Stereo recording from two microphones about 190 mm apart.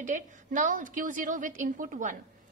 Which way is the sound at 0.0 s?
40° right (ahead or behind).